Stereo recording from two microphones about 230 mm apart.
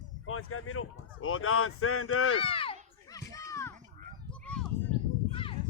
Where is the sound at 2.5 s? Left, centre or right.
Left.